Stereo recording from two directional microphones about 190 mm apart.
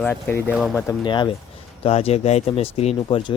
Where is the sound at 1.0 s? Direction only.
25° left (ahead or behind).